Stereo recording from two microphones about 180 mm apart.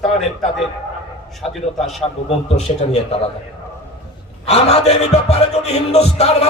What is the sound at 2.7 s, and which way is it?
Music, 35° left (ahead or behind).